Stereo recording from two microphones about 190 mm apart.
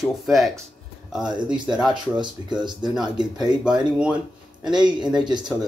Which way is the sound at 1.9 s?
25° right (ahead or behind).